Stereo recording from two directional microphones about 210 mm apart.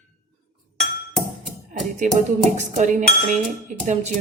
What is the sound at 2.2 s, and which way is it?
A woman's voice, 35° right (ahead or behind).